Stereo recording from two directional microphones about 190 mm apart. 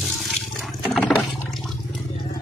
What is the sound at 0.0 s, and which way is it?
Toilet flush, centre (ahead or behind).